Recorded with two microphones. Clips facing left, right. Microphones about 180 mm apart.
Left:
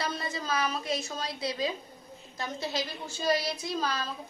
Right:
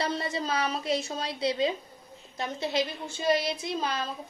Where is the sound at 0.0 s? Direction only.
30° right (ahead or behind).